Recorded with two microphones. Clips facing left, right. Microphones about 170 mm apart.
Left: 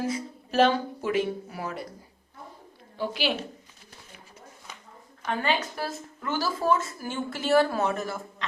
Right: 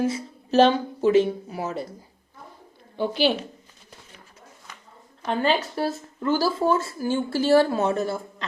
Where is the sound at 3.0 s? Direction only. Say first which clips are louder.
Right 7 dB; 30° right (ahead or behind).